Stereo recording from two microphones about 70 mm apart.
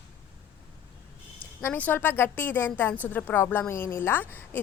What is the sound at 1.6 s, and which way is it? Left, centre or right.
Speech, left.